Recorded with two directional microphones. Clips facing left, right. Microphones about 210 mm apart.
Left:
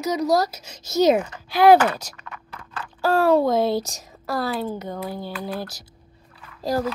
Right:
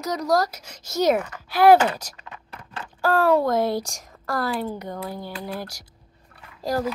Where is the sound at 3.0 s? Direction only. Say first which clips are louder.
Left 2 dB; 10° left (ahead or behind).